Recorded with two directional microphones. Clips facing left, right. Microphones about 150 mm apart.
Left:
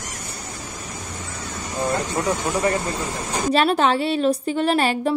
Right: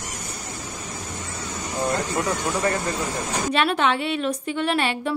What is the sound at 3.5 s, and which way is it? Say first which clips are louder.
A woman's voice: left 4 dB; 35° left (ahead or behind).